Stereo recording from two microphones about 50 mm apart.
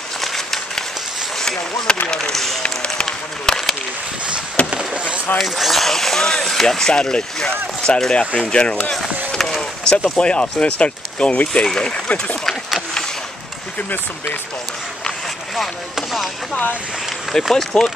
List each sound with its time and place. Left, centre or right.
0.2 s a sound: centre
2.0 s speech: centre
2.6 s run: centre
3.1 s a sound: centre
4.6 s a sound: right
5.4 s speech: centre; by 8.9 s left
9.3 s speech: centre; by 12.4 s left
15.5 s speech: centre
17.3 s speech: centre